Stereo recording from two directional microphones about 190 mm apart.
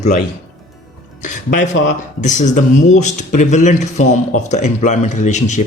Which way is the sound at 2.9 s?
40° left (ahead or behind).